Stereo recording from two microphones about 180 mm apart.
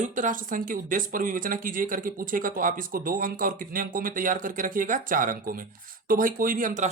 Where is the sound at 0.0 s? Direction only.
45° right (ahead or behind).